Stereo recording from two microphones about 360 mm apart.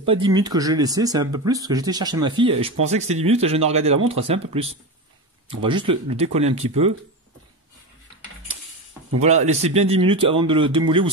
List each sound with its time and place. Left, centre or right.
0.0 s speech: centre
9.2 s speech: centre